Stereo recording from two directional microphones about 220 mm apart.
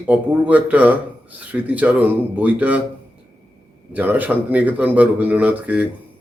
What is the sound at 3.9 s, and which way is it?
Speech, 10° right (ahead or behind).